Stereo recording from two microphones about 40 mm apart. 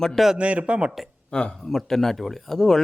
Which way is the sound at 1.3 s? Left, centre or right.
Left.